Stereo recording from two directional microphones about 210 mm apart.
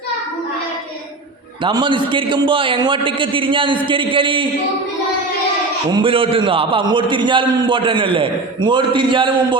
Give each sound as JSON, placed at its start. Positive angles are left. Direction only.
{"t": 1.6, "sound": "a man's voice", "side_deg": -20}
{"t": 5.9, "sound": "a man's voice", "side_deg": -25}